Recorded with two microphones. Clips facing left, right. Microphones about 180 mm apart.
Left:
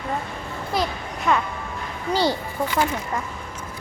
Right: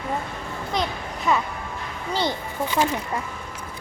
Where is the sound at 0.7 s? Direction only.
Centre (ahead or behind).